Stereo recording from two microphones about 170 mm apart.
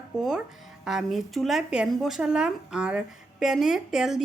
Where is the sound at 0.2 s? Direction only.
5° right (ahead or behind).